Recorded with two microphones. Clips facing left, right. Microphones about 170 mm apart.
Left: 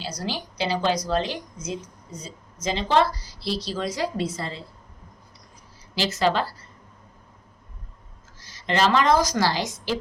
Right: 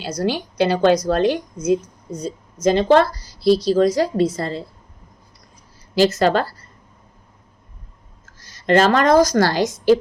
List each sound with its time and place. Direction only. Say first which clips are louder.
0.0 s a woman's voice: right 9 dB; 55° right (ahead or behind)
5.9 s speech: right 7 dB; 45° right (ahead or behind)
8.6 s a woman's voice: right 6 dB; 50° right (ahead or behind)